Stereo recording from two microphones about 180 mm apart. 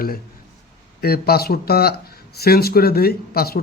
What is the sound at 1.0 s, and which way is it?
A man's voice, 60° left (ahead or behind).